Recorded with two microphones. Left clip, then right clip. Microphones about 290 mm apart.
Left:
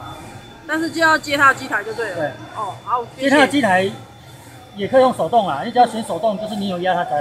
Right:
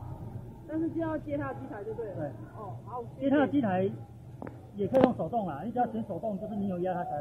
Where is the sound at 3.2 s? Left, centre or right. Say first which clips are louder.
Left 12 dB; left.